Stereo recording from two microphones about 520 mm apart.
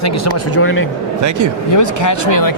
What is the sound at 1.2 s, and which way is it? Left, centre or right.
Speech, right.